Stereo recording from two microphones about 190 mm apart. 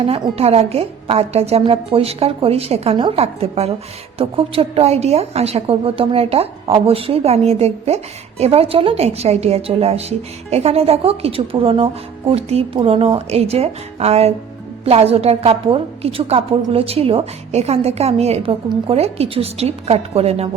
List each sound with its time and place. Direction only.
0.0 s a woman's voice: 30° right (ahead or behind)